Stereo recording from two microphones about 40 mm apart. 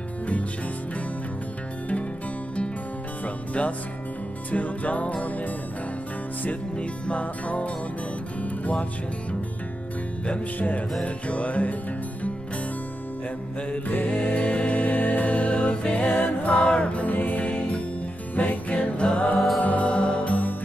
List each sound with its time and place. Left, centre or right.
4.5 s music: left
6.8 s music: left
11.2 s music: left
13.8 s music: left
14.3 s music: left
16.5 s music: left
17.6 s music: left
18.3 s music: left